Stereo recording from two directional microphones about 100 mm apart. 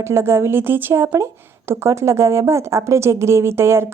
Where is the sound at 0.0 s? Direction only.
25° right (ahead or behind).